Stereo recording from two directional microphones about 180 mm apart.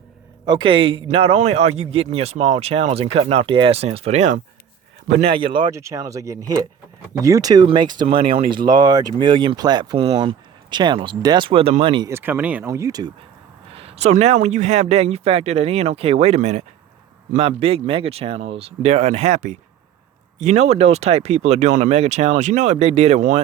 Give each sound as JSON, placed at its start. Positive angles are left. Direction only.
{"t": 0.4, "sound": "a man's voice", "side_deg": -25}
{"t": 5.7, "sound": "speech", "side_deg": -15}
{"t": 12.1, "sound": "speech", "side_deg": -10}
{"t": 13.7, "sound": "a man's voice", "side_deg": -35}